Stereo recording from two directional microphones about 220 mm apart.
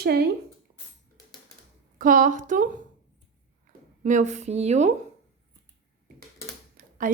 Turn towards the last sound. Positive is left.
turn(degrees=-35)  # may be behind; listen again after turning